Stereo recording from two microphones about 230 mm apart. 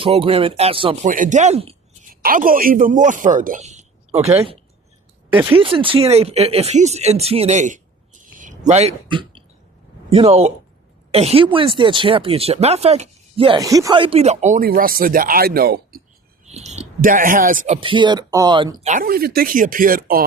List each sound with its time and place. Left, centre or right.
0.0 s speech: right
5.3 s speech: centre
5.5 s speech: right
16.5 s speech: right
17.7 s speech: right